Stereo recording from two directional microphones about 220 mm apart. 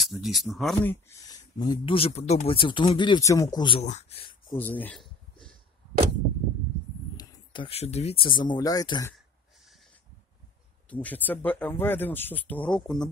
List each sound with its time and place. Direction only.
0.0 s speech: centre (ahead or behind)
0.7 s speech: 10° left (ahead or behind)
4.6 s a sound: 10° left (ahead or behind)
7.2 s speech: 20° left (ahead or behind)
10.9 s speech: 5° left (ahead or behind)